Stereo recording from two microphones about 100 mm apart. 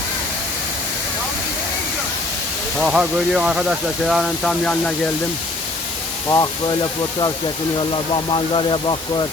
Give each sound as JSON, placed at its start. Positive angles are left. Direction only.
{"t": 2.8, "sound": "speech", "side_deg": -5}
{"t": 6.2, "sound": "speech", "side_deg": 35}
{"t": 7.8, "sound": "speech", "side_deg": 55}